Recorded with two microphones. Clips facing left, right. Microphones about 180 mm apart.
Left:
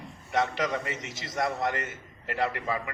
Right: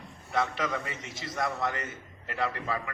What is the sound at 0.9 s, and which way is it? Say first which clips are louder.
Speech: left 3 dB; 90° left.